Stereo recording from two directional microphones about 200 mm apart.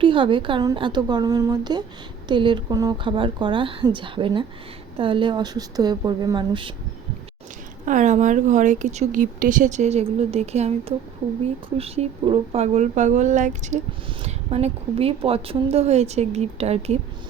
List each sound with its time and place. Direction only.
0.0 s speech: 25° right (ahead or behind)
7.9 s a woman's voice: 40° right (ahead or behind)